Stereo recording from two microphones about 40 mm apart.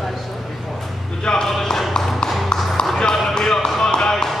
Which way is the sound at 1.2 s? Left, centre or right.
Centre.